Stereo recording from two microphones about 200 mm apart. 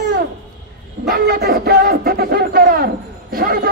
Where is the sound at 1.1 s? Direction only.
50° right (ahead or behind).